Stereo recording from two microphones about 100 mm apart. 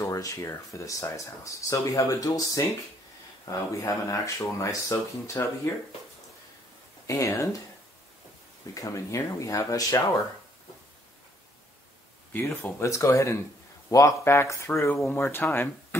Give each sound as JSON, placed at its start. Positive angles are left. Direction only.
{"t": 0.0, "sound": "speech", "side_deg": 30}
{"t": 7.1, "sound": "speech", "side_deg": 30}
{"t": 8.7, "sound": "speech", "side_deg": 30}
{"t": 12.3, "sound": "speech", "side_deg": 20}